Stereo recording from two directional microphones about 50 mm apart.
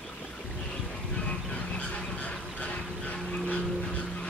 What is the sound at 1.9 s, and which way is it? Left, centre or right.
Goose, left.